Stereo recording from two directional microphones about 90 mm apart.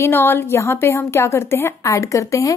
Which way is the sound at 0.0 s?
25° left (ahead or behind).